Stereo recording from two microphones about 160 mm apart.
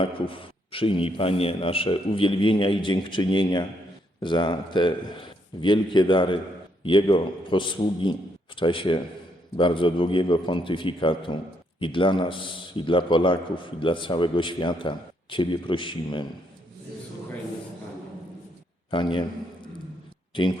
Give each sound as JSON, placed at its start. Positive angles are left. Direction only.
{"t": 0.0, "sound": "a man's voice", "side_deg": 35}
{"t": 18.9, "sound": "a man's voice", "side_deg": 30}
{"t": 20.3, "sound": "a man's voice", "side_deg": 30}